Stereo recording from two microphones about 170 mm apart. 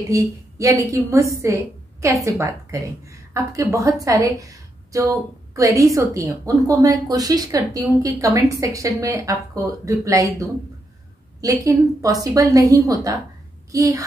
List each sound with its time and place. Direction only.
0.1 s a woman's voice: 20° right (ahead or behind)